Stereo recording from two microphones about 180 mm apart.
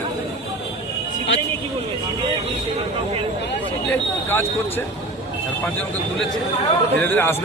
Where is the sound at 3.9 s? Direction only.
10° left (ahead or behind).